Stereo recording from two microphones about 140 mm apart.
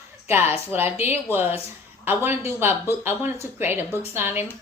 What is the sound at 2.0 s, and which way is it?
A woman's voice, 15° right (ahead or behind).